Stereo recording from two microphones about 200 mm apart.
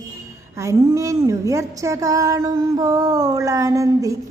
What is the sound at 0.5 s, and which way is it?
Speech, 15° right (ahead or behind).